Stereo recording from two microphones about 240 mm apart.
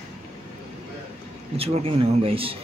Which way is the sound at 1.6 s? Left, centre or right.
Right.